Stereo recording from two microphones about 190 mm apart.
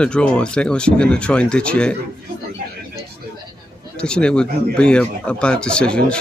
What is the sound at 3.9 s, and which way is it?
Speech, 5° left (ahead or behind).